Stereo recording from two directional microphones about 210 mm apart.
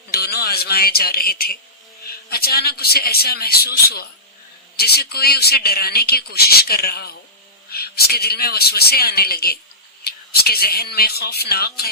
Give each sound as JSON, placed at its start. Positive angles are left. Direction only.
{"t": 0.1, "sound": "a man's voice", "side_deg": 50}